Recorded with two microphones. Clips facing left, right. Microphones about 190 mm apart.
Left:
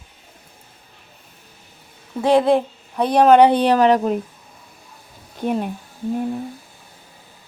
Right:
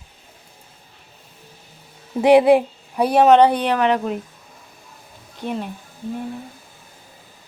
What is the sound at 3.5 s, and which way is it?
Speech, 35° left (ahead or behind).